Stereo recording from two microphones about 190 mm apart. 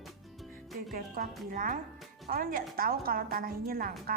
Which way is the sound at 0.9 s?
50° right (ahead or behind).